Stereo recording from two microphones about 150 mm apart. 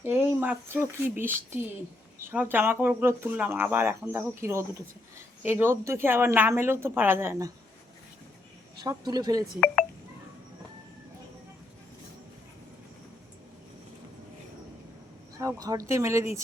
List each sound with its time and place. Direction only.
0.0 s speech: 15° right (ahead or behind)
8.8 s speech: 25° right (ahead or behind)
15.4 s speech: 20° right (ahead or behind)